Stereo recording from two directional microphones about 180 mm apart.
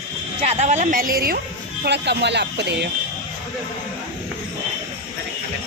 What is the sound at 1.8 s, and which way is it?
Speech, 70° right (ahead or behind).